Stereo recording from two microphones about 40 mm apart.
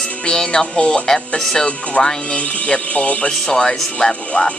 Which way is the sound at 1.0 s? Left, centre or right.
Centre.